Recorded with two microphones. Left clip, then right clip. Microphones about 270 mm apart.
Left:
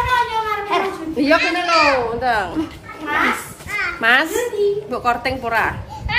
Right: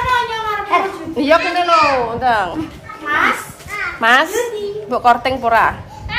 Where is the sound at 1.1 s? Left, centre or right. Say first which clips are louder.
Right 3 dB; centre.